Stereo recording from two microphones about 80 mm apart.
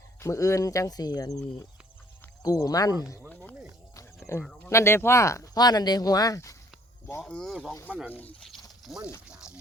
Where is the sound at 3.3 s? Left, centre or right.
Centre.